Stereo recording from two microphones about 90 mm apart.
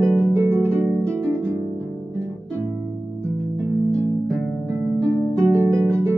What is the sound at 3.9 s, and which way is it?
Music, 30° right (ahead or behind).